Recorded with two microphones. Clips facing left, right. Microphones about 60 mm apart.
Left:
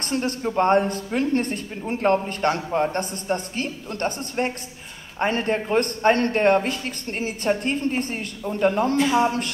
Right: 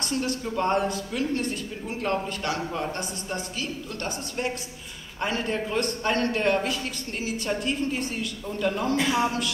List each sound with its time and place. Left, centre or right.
0.0 s speech: left